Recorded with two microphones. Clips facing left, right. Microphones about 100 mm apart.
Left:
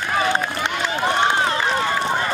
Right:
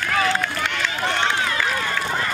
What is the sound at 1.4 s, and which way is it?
Run, 30° left (ahead or behind).